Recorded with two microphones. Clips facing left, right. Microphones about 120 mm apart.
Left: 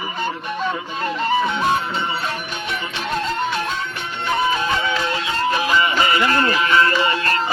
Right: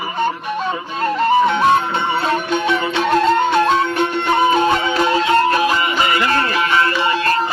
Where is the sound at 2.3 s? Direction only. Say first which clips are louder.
Right 10 dB; 85° right.